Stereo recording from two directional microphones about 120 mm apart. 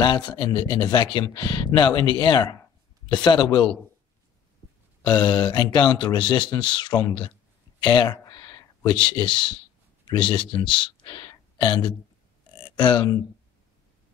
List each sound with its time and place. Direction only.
0.0 s a man's voice: 40° left (ahead or behind)
5.0 s a man's voice: 40° left (ahead or behind)